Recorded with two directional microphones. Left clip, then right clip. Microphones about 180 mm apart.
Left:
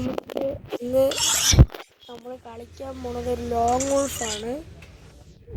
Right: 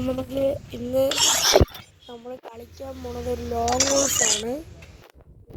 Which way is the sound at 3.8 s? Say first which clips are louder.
Right 2 dB; 40° right (ahead or behind).